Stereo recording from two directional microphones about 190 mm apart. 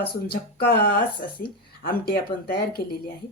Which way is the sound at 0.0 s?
55° left (ahead or behind).